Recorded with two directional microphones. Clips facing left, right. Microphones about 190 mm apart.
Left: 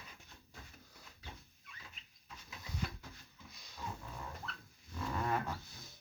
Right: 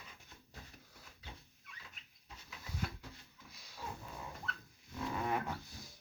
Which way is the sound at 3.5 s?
5° right (ahead or behind).